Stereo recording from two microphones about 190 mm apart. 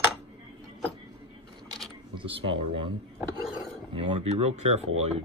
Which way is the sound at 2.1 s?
25° right (ahead or behind).